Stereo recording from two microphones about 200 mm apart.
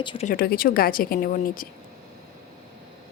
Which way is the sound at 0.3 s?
45° left (ahead or behind).